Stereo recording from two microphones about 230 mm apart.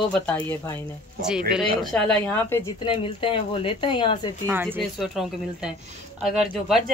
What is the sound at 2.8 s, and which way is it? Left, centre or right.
Speech, left.